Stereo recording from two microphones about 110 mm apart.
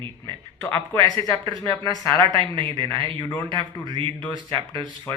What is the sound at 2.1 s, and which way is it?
Speech, 50° right (ahead or behind).